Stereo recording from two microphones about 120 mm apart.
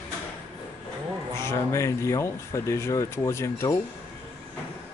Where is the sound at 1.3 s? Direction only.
25° left (ahead or behind).